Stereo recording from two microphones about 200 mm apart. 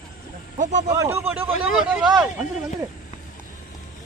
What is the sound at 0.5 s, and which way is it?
Speech, 40° right (ahead or behind).